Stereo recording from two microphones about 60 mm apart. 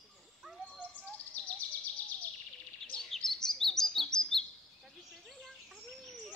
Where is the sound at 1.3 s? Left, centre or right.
Left.